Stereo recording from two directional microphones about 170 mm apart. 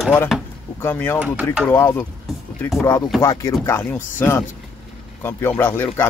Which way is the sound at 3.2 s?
20° left (ahead or behind).